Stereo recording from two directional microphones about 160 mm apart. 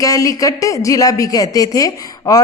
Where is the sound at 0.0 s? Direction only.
20° left (ahead or behind).